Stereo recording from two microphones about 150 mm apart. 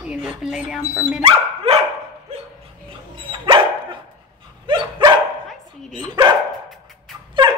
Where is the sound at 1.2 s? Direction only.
40° right (ahead or behind).